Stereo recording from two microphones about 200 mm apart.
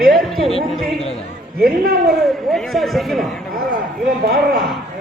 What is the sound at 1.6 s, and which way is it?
Speech, 45° right (ahead or behind).